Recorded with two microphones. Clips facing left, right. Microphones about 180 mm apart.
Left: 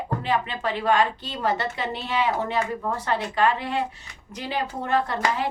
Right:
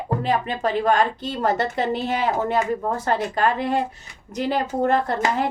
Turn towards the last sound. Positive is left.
turn(degrees=-45)  # may be behind; listen again after turning